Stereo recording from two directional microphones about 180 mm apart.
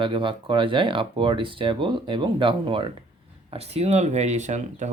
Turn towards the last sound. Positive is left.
turn(degrees=-40)  # may be behind; listen again after turning